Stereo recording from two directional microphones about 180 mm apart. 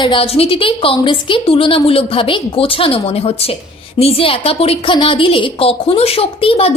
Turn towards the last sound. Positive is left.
turn(degrees=30)  # may be behind; listen again after turning